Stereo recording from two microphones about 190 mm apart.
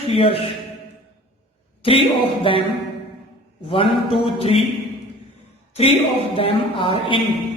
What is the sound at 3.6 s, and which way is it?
Speech, 30° left (ahead or behind).